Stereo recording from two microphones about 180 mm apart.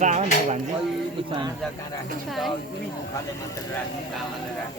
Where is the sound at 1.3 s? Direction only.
25° right (ahead or behind).